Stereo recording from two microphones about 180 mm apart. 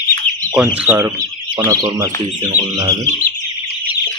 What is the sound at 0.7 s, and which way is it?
Speech, 10° right (ahead or behind).